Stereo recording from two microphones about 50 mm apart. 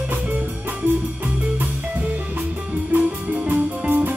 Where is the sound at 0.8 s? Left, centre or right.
Right.